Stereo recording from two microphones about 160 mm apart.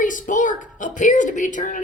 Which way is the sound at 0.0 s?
55° left (ahead or behind).